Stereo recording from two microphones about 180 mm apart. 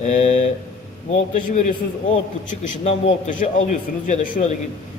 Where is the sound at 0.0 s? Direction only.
35° left (ahead or behind).